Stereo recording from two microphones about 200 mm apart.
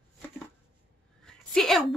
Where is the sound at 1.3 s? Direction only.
Centre (ahead or behind).